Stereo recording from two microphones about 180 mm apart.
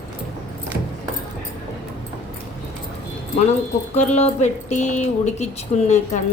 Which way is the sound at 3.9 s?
40° left (ahead or behind).